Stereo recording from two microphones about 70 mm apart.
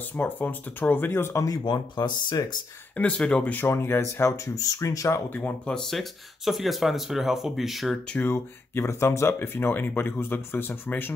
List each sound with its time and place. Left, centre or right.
0.1 s speech: left
1.3 s speech: left
1.6 s speech: left
3.0 s speech: centre
3.5 s speech: left
4.3 s speech: left
5.7 s speech: centre
8.3 s speech: left